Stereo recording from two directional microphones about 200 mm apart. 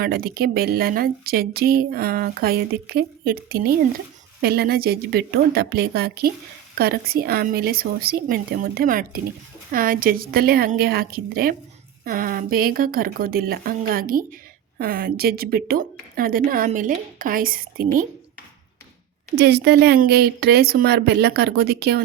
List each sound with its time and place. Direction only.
0.0 s a woman's voice: 50° right (ahead or behind)
19.4 s a woman's voice: 55° right (ahead or behind)